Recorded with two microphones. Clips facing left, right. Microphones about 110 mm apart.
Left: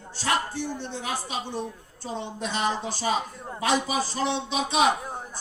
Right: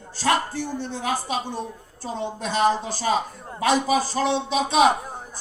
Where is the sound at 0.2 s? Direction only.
40° right (ahead or behind).